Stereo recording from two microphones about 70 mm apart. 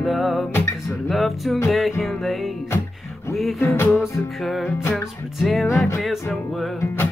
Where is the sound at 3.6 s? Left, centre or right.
Left.